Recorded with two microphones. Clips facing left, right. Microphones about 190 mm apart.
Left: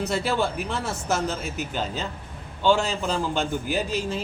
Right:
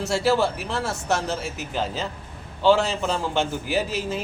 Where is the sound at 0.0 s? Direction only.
Centre (ahead or behind).